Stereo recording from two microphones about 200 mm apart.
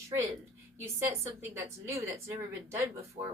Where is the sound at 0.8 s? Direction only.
15° right (ahead or behind).